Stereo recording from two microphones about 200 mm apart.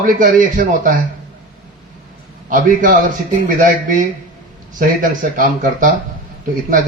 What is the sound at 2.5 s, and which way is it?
Speech, 40° right (ahead or behind).